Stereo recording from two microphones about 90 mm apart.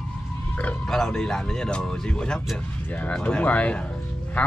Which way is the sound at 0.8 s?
5° left (ahead or behind).